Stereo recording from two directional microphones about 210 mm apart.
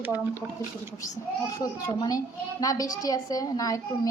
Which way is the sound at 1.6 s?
15° left (ahead or behind).